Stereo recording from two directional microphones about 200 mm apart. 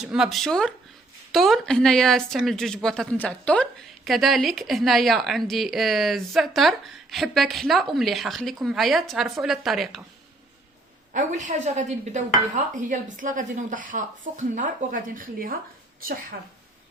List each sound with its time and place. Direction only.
0.0 s a woman's voice: 5° right (ahead or behind)
11.1 s a woman's voice: 40° right (ahead or behind)